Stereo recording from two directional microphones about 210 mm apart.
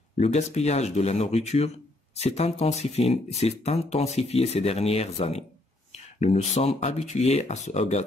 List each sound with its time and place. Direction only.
0.2 s speech: 30° left (ahead or behind)